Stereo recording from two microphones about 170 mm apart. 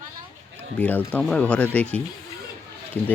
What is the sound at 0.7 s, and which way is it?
Speech, 10° left (ahead or behind).